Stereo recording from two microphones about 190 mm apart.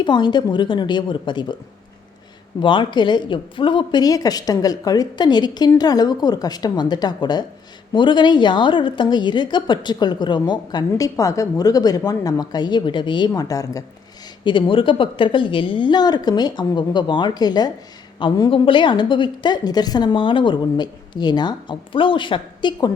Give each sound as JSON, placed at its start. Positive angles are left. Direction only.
{"t": 0.0, "sound": "a woman's voice", "side_deg": 25}
{"t": 2.6, "sound": "a woman's voice", "side_deg": 25}